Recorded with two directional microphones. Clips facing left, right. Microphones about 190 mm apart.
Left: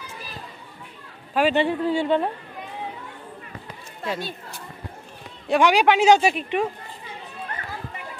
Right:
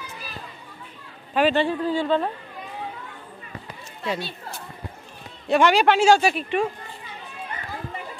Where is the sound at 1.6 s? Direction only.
25° left (ahead or behind).